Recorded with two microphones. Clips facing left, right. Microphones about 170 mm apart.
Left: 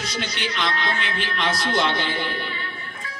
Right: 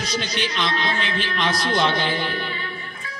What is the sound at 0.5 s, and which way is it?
Speech, 20° right (ahead or behind).